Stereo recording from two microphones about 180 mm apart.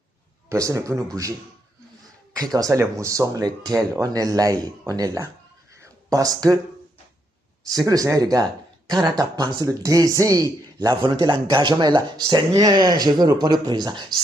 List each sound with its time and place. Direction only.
0.5 s speech: 15° right (ahead or behind)
2.6 s speech: 15° right (ahead or behind)
5.8 s a sound: 20° right (ahead or behind)
7.6 s speech: 20° right (ahead or behind)